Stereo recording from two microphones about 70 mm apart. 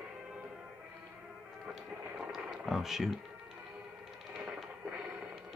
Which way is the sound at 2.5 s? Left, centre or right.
Centre.